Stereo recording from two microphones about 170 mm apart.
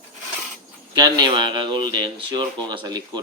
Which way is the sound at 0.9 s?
25° right (ahead or behind).